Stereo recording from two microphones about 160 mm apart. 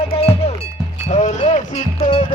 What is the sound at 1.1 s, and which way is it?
Music, 45° left (ahead or behind).